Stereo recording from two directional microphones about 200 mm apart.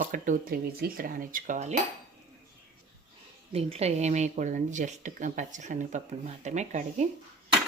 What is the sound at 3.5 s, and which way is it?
Speech, 30° right (ahead or behind).